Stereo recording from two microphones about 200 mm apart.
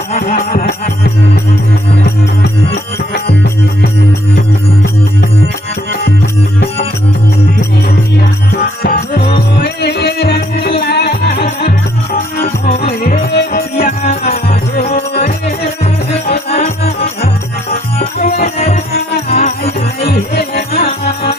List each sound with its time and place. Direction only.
0.1 s music: 35° left (ahead or behind); by 3.3 s 55° left (ahead or behind)
8.8 s music: 50° left (ahead or behind)
12.4 s music: 50° left (ahead or behind)
14.0 s music: 35° left (ahead or behind)
14.9 s music: 45° left (ahead or behind)
16.3 s music: 35° left (ahead or behind)
20.3 s music: 55° left (ahead or behind)
20.7 s music: 30° left (ahead or behind)